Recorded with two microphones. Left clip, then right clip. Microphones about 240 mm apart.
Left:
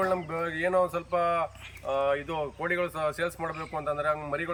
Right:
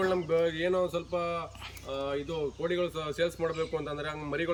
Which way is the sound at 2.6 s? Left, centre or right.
Centre.